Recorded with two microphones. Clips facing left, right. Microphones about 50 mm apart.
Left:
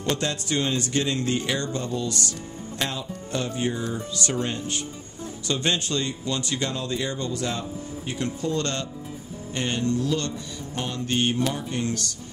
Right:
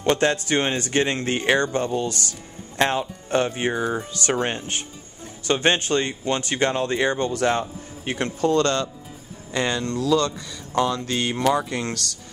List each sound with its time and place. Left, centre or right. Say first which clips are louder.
0.0 s speech: right 7 dB; right
9.7 s speech: right 2 dB; right